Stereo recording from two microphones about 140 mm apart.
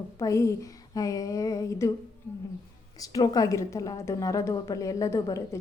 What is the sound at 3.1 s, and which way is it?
A woman's voice, 25° left (ahead or behind).